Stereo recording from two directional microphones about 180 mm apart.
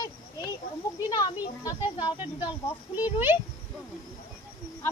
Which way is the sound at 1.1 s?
20° left (ahead or behind).